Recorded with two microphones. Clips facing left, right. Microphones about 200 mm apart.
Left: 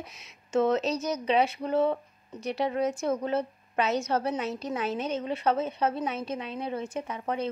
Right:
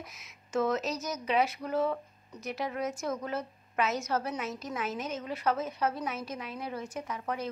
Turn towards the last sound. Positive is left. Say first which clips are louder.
# left 4 dB
turn(degrees=25)  # may be behind; listen again after turning